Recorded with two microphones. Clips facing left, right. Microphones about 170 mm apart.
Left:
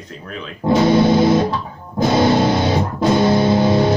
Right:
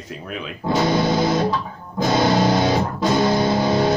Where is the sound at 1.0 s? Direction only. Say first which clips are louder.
Left 6 dB; 25° left (ahead or behind).